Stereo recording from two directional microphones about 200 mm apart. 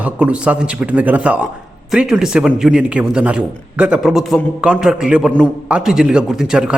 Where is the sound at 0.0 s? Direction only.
5° right (ahead or behind).